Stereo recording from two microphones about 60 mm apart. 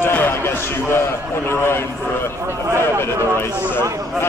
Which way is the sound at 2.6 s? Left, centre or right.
Right.